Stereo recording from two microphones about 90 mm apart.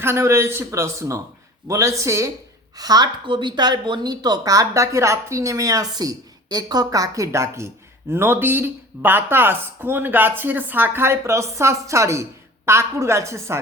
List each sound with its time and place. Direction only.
0.0 s a man's voice: 30° right (ahead or behind)
2.7 s a woman's voice: 45° right (ahead or behind)